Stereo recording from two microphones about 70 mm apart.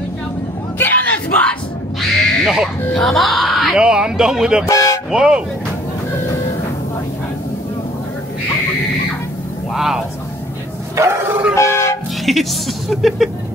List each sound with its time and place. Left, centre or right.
0.7 s crowd: left
2.0 s crow: centre
2.9 s speech: centre
3.7 s speech: centre
4.6 s toot: left
5.1 s speech: centre
9.8 s speech: centre
11.0 s bow-wow: right
11.5 s a sound: left
12.3 s speech: centre